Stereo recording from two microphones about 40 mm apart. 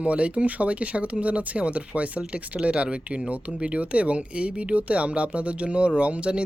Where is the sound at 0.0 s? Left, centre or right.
Right.